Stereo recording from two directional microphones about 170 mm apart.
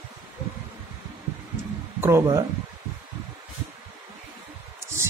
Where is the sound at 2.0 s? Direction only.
15° right (ahead or behind).